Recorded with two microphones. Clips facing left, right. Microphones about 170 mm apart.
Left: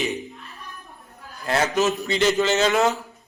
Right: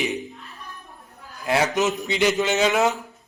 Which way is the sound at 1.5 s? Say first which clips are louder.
Even; 15° right (ahead or behind).